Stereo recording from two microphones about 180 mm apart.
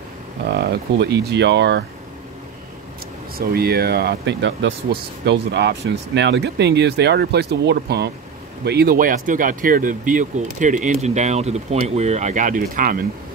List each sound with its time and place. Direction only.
0.6 s speech: 70° right (ahead or behind)
3.3 s speech: 60° right (ahead or behind); by 4.7 s 90° right
5.2 s speech: 70° right (ahead or behind); by 13.0 s 50° right (ahead or behind)